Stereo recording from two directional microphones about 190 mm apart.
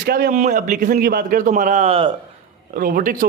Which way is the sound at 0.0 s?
50° right (ahead or behind).